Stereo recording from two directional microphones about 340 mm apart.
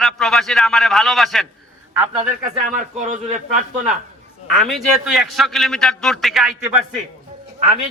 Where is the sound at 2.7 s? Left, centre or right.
Right.